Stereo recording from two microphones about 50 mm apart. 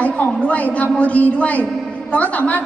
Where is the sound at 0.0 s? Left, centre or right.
Left.